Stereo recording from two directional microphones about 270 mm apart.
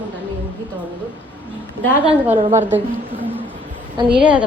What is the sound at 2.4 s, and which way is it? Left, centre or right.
Speech, right.